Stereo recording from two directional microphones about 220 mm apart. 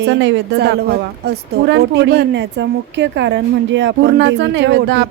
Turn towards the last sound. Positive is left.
turn(degrees=-55)  # may be behind; listen again after turning